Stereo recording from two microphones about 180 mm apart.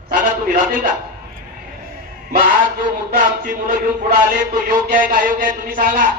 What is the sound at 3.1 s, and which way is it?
Speech, 50° right (ahead or behind).